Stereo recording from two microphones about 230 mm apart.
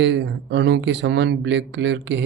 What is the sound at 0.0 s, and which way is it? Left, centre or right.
Speech, right.